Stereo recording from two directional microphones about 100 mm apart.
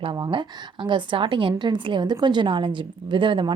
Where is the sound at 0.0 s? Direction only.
55° right (ahead or behind).